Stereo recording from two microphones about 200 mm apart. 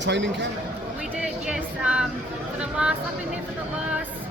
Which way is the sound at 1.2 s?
5° right (ahead or behind).